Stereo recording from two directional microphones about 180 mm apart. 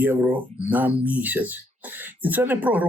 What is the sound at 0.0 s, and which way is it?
Speech, 10° right (ahead or behind).